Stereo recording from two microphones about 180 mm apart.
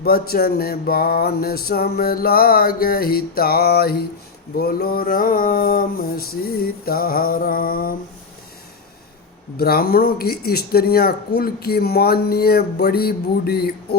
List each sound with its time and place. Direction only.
0.0 s speech: 55° left (ahead or behind)
4.6 s a sound: 55° left (ahead or behind)
9.6 s speech: 55° left (ahead or behind)